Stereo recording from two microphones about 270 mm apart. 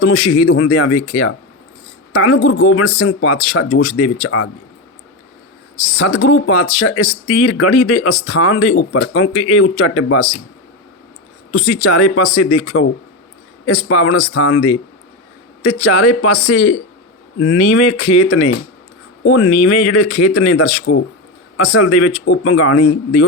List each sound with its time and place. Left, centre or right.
0.0 s speech: left
6.1 s speech: left
11.5 s speech: left
17.4 s speech: left